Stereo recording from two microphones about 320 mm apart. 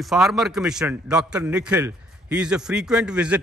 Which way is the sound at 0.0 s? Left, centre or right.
Centre.